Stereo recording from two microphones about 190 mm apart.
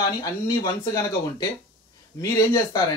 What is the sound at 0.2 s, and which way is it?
Speech, 20° left (ahead or behind).